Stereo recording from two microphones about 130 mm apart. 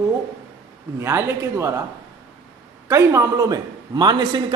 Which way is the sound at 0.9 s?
20° right (ahead or behind).